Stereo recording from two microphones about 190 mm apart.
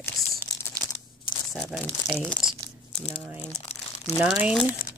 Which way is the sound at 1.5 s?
Centre (ahead or behind).